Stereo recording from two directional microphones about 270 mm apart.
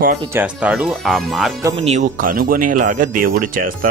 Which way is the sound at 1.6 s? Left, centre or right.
Right.